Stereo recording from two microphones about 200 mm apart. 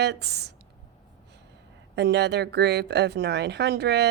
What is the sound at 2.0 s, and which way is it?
Speech, 60° right (ahead or behind).